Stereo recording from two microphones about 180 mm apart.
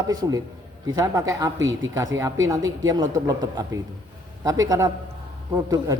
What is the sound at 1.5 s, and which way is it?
Speech, 90° right.